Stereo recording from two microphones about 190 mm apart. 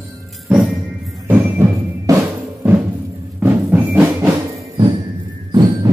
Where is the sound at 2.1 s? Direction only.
20° right (ahead or behind).